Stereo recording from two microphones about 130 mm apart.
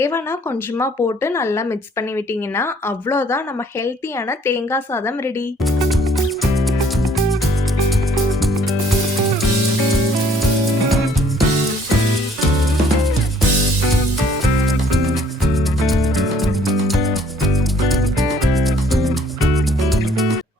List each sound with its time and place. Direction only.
0.0 s speech: 20° left (ahead or behind)
6.4 s music: centre (ahead or behind)
10.8 s music: centre (ahead or behind)
15.5 s music: centre (ahead or behind)